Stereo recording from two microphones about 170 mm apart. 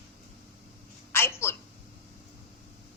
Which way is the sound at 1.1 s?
15° left (ahead or behind).